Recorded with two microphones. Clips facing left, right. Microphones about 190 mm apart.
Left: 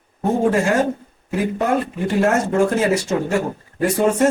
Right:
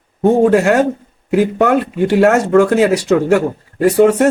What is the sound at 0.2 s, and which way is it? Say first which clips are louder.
Speech: right 7 dB; 70° right (ahead or behind).